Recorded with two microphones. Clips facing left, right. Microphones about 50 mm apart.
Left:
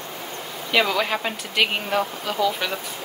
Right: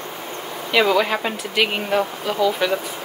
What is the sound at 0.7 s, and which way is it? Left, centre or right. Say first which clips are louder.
Speech: right 4 dB; centre.